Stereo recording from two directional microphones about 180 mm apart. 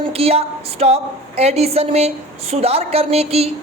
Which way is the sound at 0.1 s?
35° right (ahead or behind).